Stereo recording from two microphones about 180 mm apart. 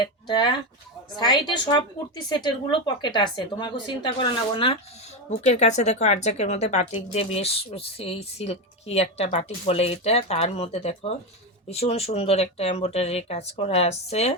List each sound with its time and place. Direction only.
0.0 s speech: 25° left (ahead or behind)
5.5 s speech: 40° left (ahead or behind)